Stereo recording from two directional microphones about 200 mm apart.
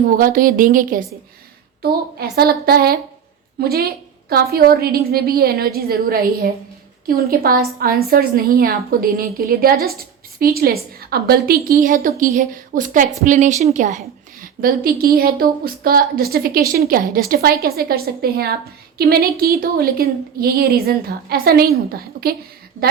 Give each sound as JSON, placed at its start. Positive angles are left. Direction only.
{"t": 0.2, "sound": "a woman's voice", "side_deg": -45}